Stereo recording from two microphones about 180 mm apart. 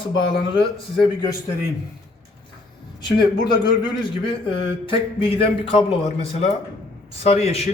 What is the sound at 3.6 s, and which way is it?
A man's voice, 25° left (ahead or behind).